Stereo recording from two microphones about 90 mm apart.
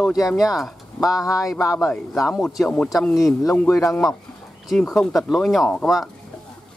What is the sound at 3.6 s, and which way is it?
Speech, 30° left (ahead or behind).